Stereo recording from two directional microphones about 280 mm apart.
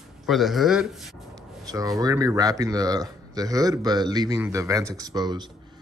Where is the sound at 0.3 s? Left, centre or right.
Centre.